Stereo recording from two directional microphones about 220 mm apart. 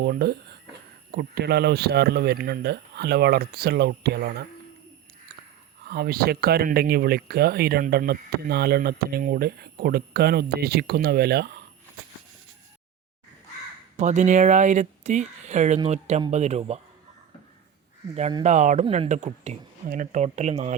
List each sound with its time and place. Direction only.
0.0 s speech: 45° right (ahead or behind)
5.9 s speech: 45° right (ahead or behind)
13.9 s speech: 35° right (ahead or behind)
18.1 s speech: 25° right (ahead or behind)